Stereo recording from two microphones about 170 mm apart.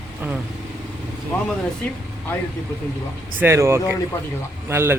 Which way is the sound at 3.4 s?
15° right (ahead or behind).